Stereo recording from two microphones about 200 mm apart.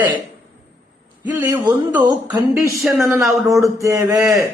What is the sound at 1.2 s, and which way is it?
Speech, 10° right (ahead or behind).